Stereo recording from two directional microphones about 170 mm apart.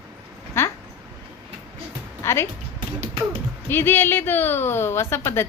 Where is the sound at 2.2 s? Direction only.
15° left (ahead or behind).